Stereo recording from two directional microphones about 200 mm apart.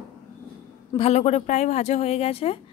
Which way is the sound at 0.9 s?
30° left (ahead or behind).